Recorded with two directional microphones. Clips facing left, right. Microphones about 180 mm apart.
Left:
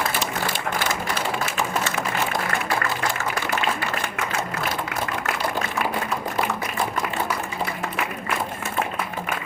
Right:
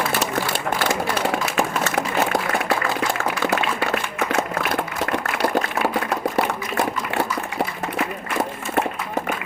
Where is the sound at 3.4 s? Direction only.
70° right (ahead or behind).